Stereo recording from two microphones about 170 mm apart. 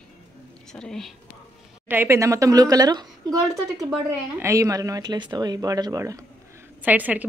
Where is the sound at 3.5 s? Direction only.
Centre (ahead or behind).